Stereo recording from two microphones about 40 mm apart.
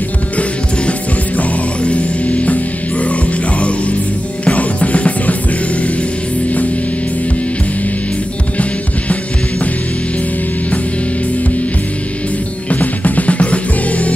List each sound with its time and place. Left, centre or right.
0.4 s music: left
12.6 s music: left